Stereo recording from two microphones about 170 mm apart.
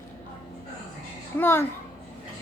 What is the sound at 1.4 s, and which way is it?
Speech, 15° left (ahead or behind).